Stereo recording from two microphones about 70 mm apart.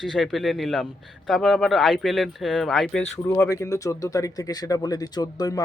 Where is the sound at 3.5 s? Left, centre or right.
Left.